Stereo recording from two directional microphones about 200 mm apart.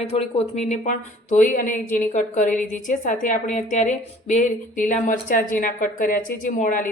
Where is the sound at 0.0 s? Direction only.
30° left (ahead or behind).